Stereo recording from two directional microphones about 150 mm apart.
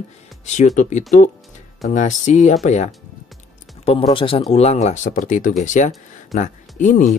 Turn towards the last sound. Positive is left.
turn(degrees=55)  # may be behind; listen again after turning